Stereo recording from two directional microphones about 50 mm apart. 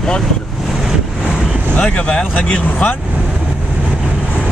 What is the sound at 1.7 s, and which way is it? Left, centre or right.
Speech, left.